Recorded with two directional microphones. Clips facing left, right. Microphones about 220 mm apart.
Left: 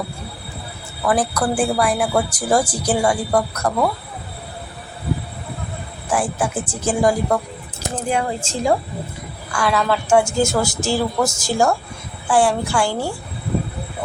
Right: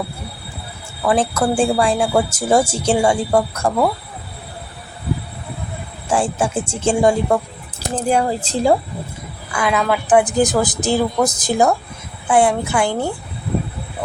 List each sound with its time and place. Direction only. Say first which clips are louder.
1.1 s a woman's voice: right 3 dB; 25° right (ahead or behind)
6.1 s a woman's voice: right 2 dB; 25° right (ahead or behind)
9.6 s a woman's voice: right 1 dB; 15° right (ahead or behind)